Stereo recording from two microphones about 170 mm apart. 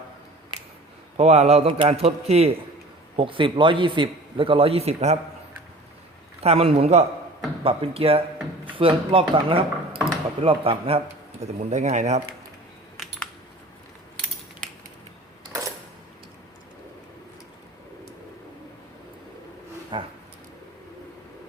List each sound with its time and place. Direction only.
1.1 s a man's voice: 40° right (ahead or behind)
6.4 s a man's voice: 35° right (ahead or behind)
19.9 s roaring cats: 30° right (ahead or behind)